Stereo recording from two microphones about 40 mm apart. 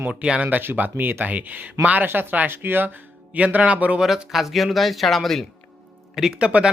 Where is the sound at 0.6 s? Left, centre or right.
Right.